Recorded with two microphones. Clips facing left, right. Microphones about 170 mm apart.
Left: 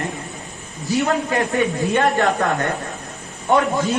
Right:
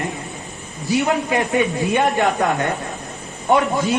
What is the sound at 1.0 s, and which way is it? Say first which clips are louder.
A man's voice: left 1 dB; 20° right (ahead or behind).